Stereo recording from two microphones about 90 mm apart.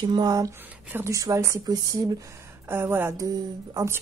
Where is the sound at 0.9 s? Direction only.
30° right (ahead or behind).